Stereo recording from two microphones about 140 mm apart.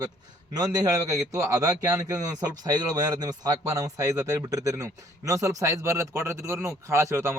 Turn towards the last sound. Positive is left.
turn(degrees=-20)  # may be behind; listen again after turning